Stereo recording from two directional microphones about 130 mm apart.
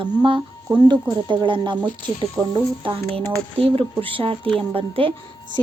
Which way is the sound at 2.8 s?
45° right (ahead or behind).